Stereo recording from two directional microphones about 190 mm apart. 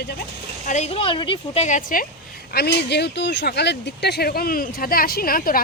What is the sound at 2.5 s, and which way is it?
Speech, 60° left (ahead or behind).